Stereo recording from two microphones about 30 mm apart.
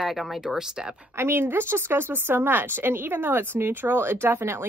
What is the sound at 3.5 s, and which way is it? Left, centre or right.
Speech, right.